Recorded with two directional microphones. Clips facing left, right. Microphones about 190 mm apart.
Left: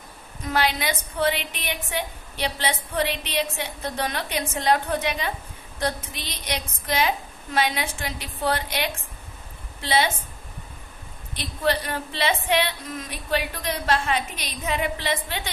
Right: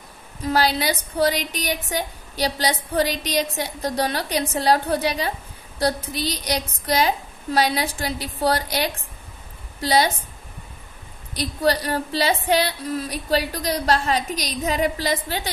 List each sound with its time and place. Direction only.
0.4 s a woman's voice: 35° right (ahead or behind)
11.3 s a woman's voice: 40° right (ahead or behind)